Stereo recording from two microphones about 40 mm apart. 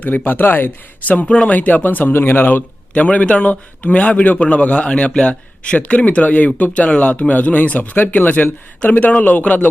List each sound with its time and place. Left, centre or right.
0.0 s speech: left
1.2 s a man's voice: left
1.5 s a man's voice: left
2.1 s speech: left
2.9 s a man's voice: left